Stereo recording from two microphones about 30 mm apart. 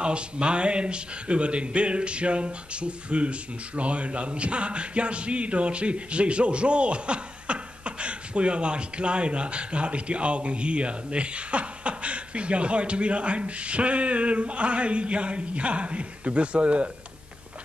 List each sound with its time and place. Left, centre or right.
0.0 s speech: right